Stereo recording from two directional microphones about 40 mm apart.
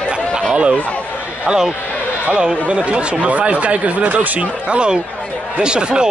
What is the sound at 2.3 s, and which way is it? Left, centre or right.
Speech, right.